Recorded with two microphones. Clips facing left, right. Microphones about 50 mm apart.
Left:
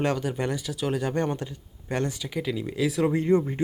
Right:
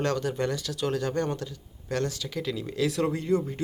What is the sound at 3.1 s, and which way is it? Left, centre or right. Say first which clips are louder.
Speech: left 4 dB; left.